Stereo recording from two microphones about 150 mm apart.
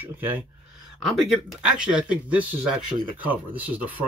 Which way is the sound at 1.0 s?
Centre (ahead or behind).